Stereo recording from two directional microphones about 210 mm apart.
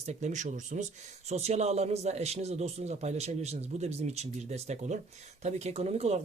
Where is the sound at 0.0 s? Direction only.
35° right (ahead or behind).